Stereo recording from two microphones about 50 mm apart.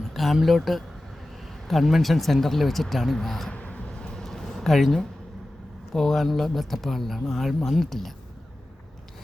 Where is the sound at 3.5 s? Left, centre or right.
Left.